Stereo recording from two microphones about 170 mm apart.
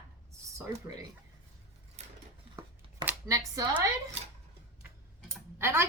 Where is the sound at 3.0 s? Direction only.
15° right (ahead or behind).